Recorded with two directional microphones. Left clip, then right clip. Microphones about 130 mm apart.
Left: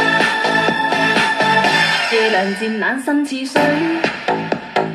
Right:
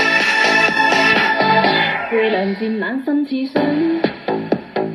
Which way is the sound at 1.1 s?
15° right (ahead or behind).